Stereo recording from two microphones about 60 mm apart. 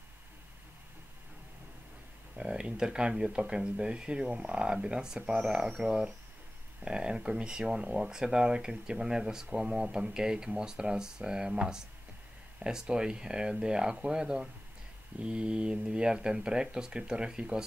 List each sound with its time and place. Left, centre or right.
2.3 s speech: centre